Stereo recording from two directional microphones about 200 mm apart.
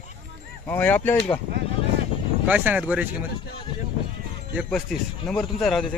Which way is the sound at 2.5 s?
10° right (ahead or behind).